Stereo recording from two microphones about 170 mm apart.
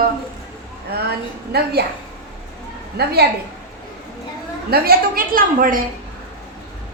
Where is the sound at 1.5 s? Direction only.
70° right (ahead or behind).